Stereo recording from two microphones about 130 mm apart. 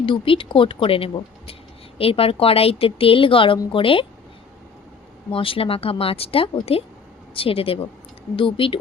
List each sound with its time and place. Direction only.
0.0 s a woman's voice: 40° left (ahead or behind)
5.3 s a woman's voice: 45° left (ahead or behind)